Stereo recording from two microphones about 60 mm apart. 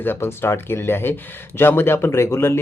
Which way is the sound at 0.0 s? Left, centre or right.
Left.